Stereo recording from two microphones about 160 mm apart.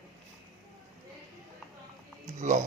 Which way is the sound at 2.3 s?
45° right (ahead or behind).